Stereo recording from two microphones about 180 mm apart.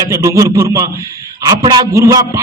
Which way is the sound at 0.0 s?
20° right (ahead or behind).